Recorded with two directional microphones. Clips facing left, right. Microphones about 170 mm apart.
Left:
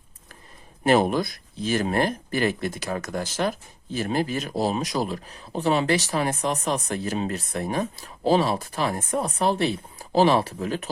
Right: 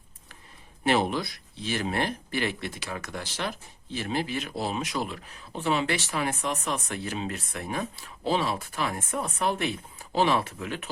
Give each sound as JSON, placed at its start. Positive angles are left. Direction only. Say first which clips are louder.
{"t": 0.9, "sound": "speech", "louder": "left 5 dB", "side_deg": 45}